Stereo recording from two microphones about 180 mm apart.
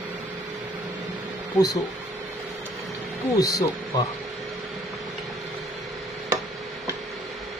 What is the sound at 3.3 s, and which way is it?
Speech, 20° left (ahead or behind).